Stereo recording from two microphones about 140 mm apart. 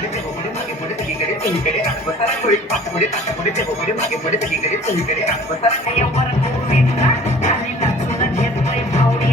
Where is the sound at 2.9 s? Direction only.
55° left (ahead or behind).